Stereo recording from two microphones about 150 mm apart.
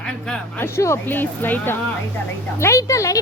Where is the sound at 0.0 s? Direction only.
5° left (ahead or behind).